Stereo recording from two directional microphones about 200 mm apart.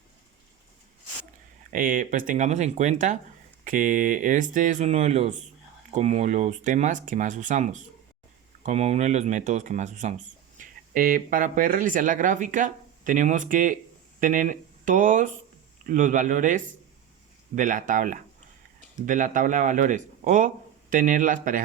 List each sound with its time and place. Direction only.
1.7 s speech: 40° right (ahead or behind)